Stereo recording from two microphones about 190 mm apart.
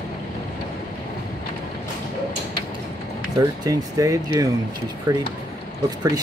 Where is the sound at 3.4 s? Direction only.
20° right (ahead or behind).